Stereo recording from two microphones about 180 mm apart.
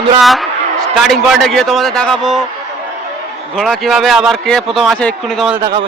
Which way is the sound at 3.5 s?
Centre (ahead or behind).